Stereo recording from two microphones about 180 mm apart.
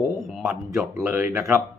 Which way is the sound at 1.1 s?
15° right (ahead or behind).